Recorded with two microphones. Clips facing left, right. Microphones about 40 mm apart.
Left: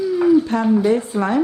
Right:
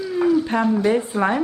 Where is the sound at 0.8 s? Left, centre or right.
Centre.